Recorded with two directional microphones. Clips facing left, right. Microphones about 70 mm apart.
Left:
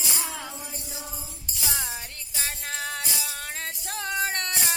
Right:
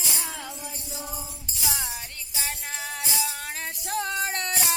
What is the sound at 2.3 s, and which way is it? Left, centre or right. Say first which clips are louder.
Music: left 1 dB; centre.